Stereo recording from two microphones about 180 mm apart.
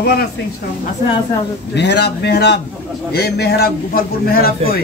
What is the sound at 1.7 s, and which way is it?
A man's voice, 70° left (ahead or behind).